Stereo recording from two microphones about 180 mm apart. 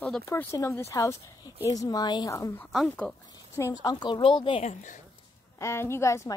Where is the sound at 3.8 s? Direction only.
25° left (ahead or behind); by 5.0 s 40° left (ahead or behind).